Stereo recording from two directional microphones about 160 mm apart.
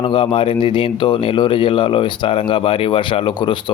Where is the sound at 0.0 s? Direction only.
30° left (ahead or behind).